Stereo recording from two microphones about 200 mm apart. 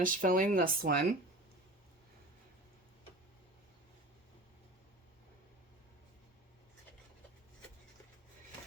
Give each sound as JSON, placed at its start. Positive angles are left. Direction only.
{"t": 0.0, "sound": "speech", "side_deg": -45}